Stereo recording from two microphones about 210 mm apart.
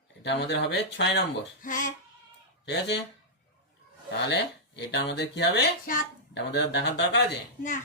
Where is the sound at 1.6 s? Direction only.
40° left (ahead or behind).